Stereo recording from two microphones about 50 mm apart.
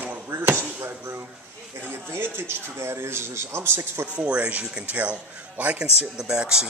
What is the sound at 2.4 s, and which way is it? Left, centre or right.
A man's voice, right.